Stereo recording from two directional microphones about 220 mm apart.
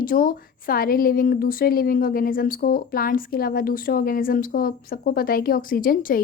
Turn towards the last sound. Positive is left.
turn(degrees=40)  # may be behind; listen again after turning